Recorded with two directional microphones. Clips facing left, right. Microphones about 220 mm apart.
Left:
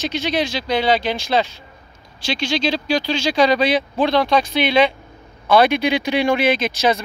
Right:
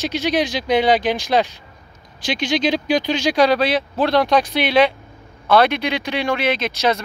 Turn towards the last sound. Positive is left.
turn(degrees=5)  # may be behind; listen again after turning